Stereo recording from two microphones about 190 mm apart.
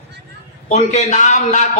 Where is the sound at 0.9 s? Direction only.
40° left (ahead or behind).